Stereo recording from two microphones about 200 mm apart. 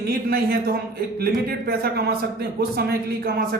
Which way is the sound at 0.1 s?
50° right (ahead or behind).